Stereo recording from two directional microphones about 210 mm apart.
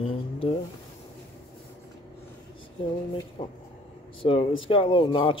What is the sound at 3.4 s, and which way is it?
Speech, 25° left (ahead or behind).